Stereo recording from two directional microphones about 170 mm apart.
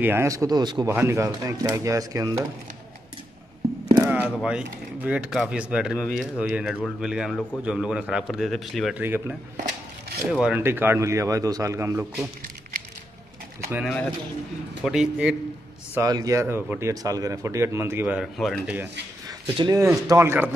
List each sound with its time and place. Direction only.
0.0 s speech: 15° right (ahead or behind)
4.0 s a man's voice: 10° right (ahead or behind)
9.0 s speech: 10° right (ahead or behind)
13.8 s a man's voice: 5° left (ahead or behind)
15.9 s speech: 20° right (ahead or behind); by 18.8 s centre (ahead or behind)
19.2 s speech: 30° right (ahead or behind)